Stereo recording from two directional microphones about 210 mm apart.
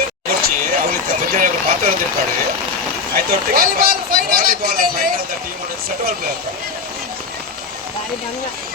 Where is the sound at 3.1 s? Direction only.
45° right (ahead or behind).